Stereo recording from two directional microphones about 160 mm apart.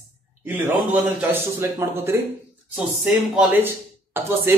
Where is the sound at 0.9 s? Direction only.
15° right (ahead or behind).